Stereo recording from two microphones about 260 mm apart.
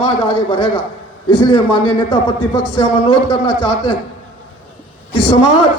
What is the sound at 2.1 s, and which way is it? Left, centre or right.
A man's voice, left.